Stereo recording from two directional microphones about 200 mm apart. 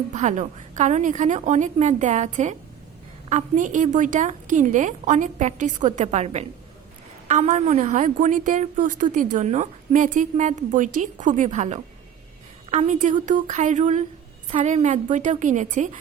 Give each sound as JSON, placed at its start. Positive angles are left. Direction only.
{"t": 0.1, "sound": "a woman's voice", "side_deg": -35}